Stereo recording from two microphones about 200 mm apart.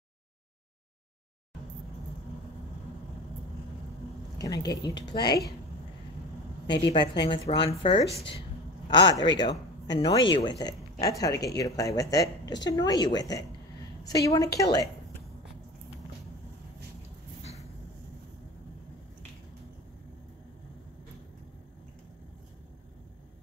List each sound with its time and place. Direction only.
4.4 s speech: 20° left (ahead or behind)
6.8 s speech: 25° left (ahead or behind)